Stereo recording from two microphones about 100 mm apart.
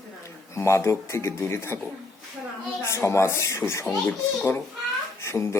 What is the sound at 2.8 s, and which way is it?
Speech, 30° left (ahead or behind).